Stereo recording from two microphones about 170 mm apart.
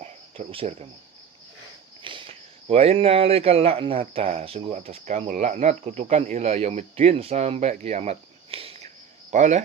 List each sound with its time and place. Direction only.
0.0 s cricket: 35° right (ahead or behind)
2.0 s speech: 30° right (ahead or behind)